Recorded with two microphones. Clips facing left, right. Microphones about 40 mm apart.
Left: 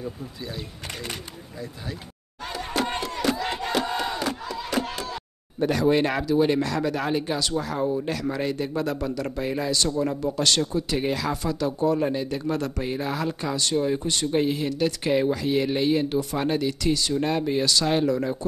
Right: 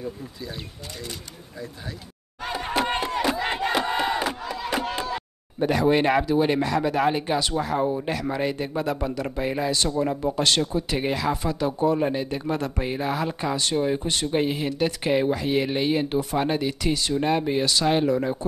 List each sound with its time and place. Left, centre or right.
2.4 s music: centre
3.2 s battle cry: right
10.6 s speech: centre